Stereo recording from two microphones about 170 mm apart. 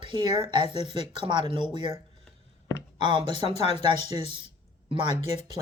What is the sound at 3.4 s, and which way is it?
Speech, 40° left (ahead or behind).